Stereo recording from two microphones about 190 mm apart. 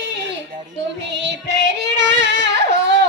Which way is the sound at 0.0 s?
65° right (ahead or behind).